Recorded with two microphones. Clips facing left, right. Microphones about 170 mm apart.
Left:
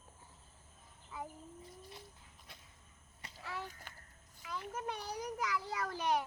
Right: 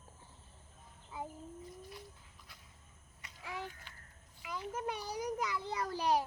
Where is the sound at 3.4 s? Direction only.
15° right (ahead or behind).